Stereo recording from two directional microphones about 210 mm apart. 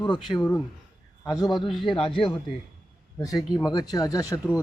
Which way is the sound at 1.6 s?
Centre (ahead or behind).